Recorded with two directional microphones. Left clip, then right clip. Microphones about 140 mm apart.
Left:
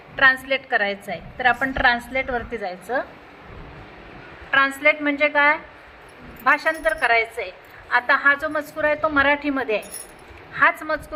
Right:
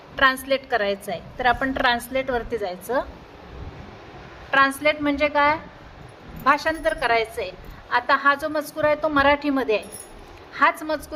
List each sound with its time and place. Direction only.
0.2 s a woman's voice: 25° right (ahead or behind)
4.5 s a woman's voice: 25° right (ahead or behind)